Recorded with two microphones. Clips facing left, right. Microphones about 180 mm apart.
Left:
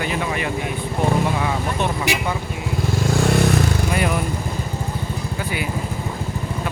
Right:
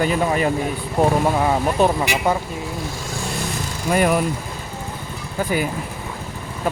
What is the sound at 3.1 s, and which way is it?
Vehicle, 65° left (ahead or behind).